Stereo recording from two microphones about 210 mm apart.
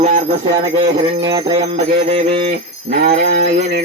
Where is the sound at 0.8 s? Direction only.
20° right (ahead or behind).